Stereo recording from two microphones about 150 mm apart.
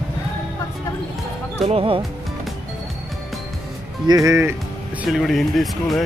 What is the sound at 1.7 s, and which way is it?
Speech, 35° right (ahead or behind).